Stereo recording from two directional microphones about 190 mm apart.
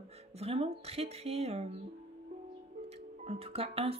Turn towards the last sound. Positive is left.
turn(degrees=-30)  # may be behind; listen again after turning